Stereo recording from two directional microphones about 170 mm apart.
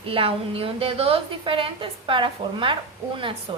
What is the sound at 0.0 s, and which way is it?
A woman's voice, 35° right (ahead or behind).